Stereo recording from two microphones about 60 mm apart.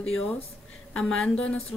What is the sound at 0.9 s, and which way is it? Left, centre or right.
Speech, centre.